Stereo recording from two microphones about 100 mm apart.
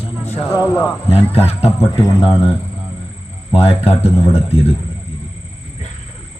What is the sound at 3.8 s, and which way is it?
Speech, 90° left.